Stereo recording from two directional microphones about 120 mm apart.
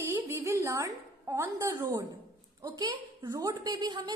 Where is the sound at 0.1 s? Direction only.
25° right (ahead or behind).